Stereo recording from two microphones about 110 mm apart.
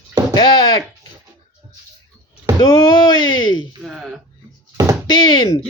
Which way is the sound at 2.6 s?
35° left (ahead or behind).